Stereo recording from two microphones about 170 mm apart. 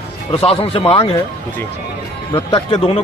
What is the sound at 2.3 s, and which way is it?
Speech, 30° left (ahead or behind).